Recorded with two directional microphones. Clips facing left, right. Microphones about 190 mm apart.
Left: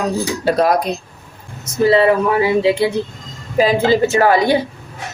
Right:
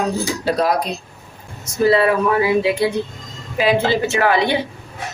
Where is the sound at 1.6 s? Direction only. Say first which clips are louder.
Left 2 dB; 25° left (ahead or behind).